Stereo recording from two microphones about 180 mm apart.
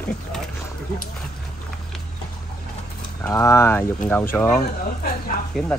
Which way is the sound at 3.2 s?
15° left (ahead or behind).